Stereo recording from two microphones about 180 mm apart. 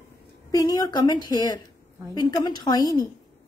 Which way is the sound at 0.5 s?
20° left (ahead or behind).